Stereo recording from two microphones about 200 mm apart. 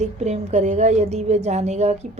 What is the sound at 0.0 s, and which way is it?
A woman's voice, 35° right (ahead or behind).